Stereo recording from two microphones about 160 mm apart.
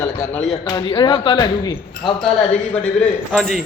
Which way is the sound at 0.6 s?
25° left (ahead or behind).